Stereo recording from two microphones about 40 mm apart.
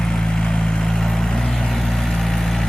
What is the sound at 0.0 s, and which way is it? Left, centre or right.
Vehicle, centre.